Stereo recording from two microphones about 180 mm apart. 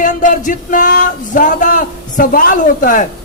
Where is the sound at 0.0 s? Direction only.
45° left (ahead or behind).